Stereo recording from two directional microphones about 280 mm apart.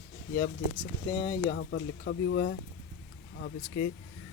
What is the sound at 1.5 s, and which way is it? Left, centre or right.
Speech, left.